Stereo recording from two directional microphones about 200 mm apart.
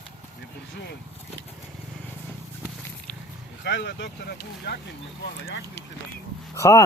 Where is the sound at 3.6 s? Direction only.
60° left (ahead or behind).